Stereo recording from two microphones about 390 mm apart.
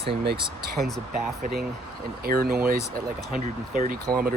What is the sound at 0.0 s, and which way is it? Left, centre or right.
Speech, centre.